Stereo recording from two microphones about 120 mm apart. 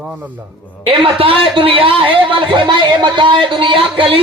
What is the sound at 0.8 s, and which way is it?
A man's voice, 50° right (ahead or behind).